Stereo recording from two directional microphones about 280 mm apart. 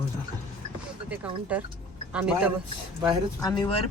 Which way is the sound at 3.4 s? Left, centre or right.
Centre.